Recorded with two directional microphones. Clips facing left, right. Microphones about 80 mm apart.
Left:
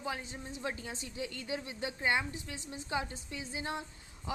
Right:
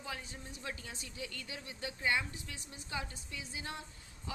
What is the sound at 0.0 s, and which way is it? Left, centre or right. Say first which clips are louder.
Speech: left 6 dB; left.